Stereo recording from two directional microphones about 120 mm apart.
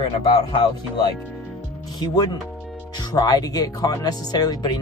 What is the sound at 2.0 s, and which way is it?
Speech, 35° left (ahead or behind).